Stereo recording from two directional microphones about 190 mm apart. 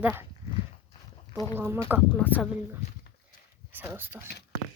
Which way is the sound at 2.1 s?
10° left (ahead or behind).